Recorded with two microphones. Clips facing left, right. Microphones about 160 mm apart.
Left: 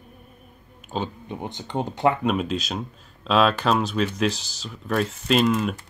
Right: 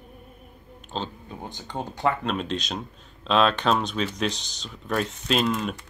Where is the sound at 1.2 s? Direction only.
20° left (ahead or behind).